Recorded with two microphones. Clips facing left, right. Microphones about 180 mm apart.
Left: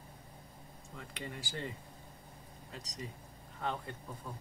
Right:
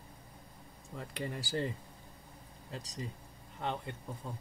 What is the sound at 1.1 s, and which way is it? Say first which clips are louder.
Speech: right 6 dB; 35° right (ahead or behind).